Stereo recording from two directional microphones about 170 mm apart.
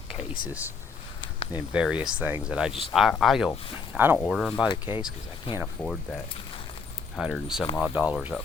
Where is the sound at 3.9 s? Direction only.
10° right (ahead or behind).